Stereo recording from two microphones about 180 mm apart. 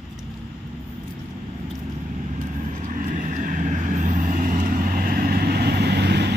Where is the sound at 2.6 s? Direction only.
45° right (ahead or behind); by 6.3 s 65° right (ahead or behind).